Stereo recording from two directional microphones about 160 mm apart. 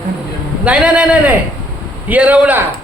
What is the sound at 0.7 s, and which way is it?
A man's voice, 5° right (ahead or behind).